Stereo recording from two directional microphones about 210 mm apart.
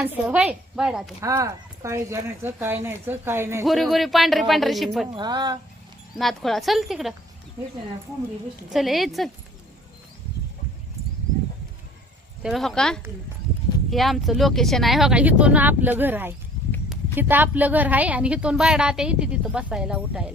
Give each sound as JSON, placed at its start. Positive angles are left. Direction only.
{"t": 0.0, "sound": "a woman's voice", "side_deg": -5}
{"t": 1.2, "sound": "speech", "side_deg": -15}
{"t": 3.7, "sound": "a woman's voice", "side_deg": 0}
{"t": 5.1, "sound": "speech", "side_deg": -20}
{"t": 6.1, "sound": "a woman's voice", "side_deg": 0}
{"t": 8.7, "sound": "a woman's voice", "side_deg": 0}
{"t": 12.4, "sound": "a woman's voice", "side_deg": 0}